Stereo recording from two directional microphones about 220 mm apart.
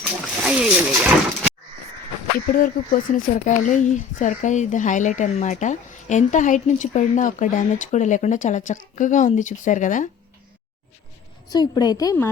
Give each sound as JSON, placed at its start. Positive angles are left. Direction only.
{"t": 0.0, "sound": "speech", "side_deg": -5}
{"t": 2.6, "sound": "speech", "side_deg": 35}
{"t": 11.4, "sound": "a woman's voice", "side_deg": 20}